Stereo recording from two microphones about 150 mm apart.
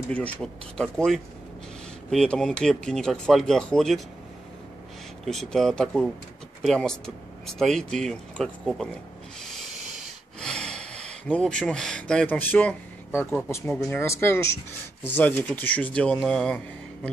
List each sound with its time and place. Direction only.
0.1 s speech: 10° left (ahead or behind)
5.2 s speech: centre (ahead or behind)
9.4 s train: centre (ahead or behind)
10.4 s a sound: 5° left (ahead or behind)
11.3 s speech: 5° left (ahead or behind)